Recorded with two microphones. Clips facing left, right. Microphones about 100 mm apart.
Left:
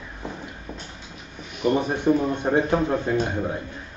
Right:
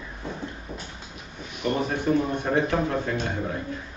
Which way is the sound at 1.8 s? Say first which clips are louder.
Even; 20° left (ahead or behind).